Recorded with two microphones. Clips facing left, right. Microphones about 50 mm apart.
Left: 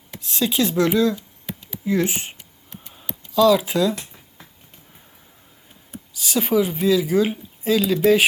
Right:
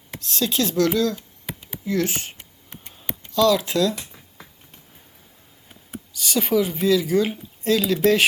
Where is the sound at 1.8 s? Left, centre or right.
Left.